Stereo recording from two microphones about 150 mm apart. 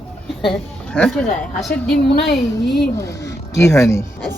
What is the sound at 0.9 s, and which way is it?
Speech, 5° left (ahead or behind).